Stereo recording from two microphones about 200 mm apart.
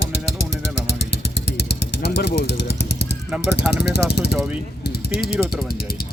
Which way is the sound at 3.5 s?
55° left (ahead or behind).